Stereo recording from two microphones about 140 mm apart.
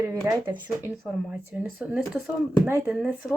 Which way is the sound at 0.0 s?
15° right (ahead or behind).